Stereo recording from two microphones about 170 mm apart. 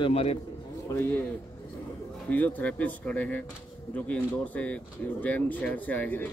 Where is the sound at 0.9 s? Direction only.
20° left (ahead or behind).